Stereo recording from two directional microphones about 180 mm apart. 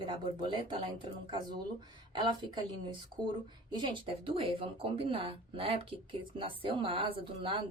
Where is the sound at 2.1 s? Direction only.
25° right (ahead or behind).